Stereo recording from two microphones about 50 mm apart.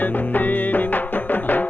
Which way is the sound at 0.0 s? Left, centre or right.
Left.